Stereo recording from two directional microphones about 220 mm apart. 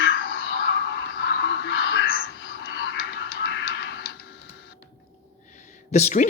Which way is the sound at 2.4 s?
45° left (ahead or behind).